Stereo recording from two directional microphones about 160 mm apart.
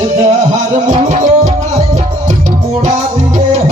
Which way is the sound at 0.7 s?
45° right (ahead or behind).